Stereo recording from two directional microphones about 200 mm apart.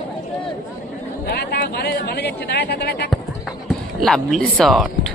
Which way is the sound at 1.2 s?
55° left (ahead or behind).